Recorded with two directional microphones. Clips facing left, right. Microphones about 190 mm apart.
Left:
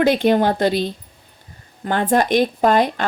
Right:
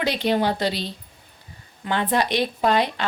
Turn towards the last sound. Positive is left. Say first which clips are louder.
# left 5 dB
turn(degrees=45)  # may be behind; listen again after turning